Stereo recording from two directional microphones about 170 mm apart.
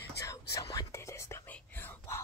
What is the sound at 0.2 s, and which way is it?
Whispering, 20° left (ahead or behind).